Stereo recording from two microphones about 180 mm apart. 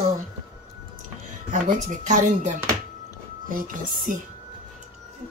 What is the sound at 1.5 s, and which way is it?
Speech, 45° right (ahead or behind).